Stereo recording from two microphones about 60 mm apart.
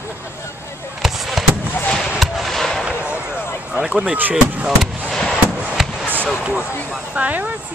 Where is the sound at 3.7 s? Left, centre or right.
Centre.